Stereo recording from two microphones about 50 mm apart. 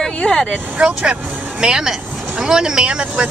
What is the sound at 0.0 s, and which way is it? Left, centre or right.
Vehicle, centre.